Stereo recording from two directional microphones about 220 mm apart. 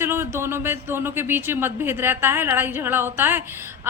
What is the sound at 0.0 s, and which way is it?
Speech, 10° right (ahead or behind).